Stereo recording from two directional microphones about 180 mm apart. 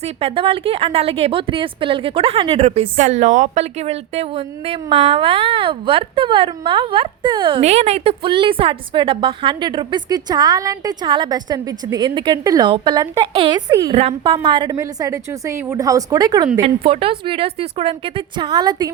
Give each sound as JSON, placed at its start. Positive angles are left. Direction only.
{"t": 0.0, "sound": "a woman's voice", "side_deg": -35}
{"t": 13.7, "sound": "a woman's voice", "side_deg": -15}
{"t": 13.9, "sound": "a woman's voice", "side_deg": -35}